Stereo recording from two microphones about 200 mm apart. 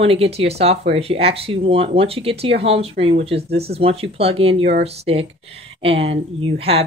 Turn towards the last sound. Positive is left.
turn(degrees=-30)  # may be behind; listen again after turning